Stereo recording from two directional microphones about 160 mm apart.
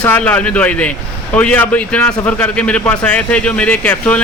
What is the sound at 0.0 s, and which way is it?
A man's voice, 10° left (ahead or behind).